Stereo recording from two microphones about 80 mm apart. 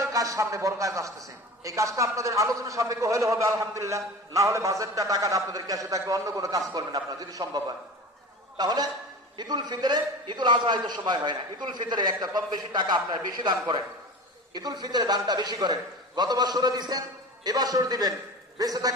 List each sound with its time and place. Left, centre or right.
0.0 s a man's voice: right